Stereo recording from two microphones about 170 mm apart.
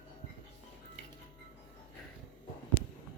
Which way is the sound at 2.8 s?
90° left.